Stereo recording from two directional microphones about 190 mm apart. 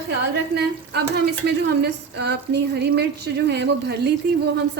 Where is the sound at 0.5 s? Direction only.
60° right (ahead or behind).